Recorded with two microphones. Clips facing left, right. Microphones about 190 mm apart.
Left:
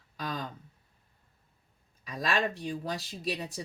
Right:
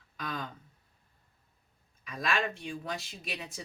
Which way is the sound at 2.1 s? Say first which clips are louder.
Left 2 dB; 35° left (ahead or behind).